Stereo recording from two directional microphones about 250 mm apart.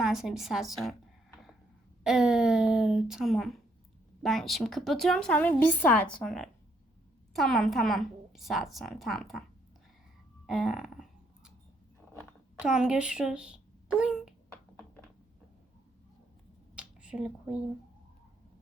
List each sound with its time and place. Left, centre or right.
0.0 s a woman's voice: centre
2.0 s a woman's voice: centre
10.4 s a woman's voice: centre
12.6 s speech: centre
16.7 s a sound: centre